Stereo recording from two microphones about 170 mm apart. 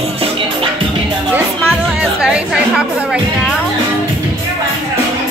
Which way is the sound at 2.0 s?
5° right (ahead or behind).